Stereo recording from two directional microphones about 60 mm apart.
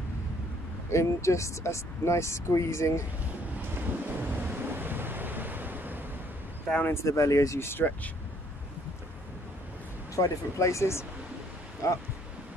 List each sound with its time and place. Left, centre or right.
0.9 s speech: left
3.5 s waves: right
6.9 s speech: left
10.1 s speech: left
11.8 s speech: left